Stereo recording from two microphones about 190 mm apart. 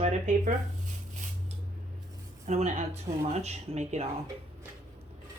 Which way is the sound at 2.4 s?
35° right (ahead or behind).